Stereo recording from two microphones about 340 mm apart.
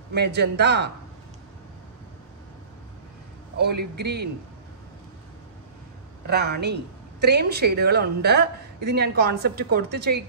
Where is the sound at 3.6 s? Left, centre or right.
Right.